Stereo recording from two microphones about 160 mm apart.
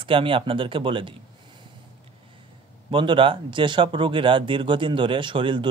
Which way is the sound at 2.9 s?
30° right (ahead or behind).